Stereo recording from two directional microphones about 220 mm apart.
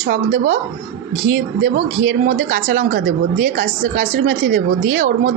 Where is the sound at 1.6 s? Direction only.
60° right (ahead or behind).